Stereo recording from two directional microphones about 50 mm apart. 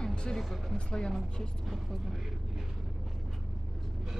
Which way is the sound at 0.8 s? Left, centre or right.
Centre.